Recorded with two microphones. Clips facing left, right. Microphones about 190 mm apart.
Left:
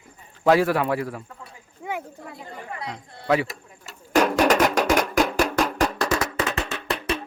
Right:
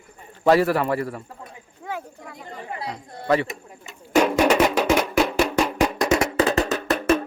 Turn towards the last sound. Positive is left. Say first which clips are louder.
# right 7 dB
turn(degrees=-45)  # may be behind; listen again after turning